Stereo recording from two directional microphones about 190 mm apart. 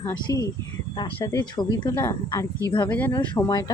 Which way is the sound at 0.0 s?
15° left (ahead or behind).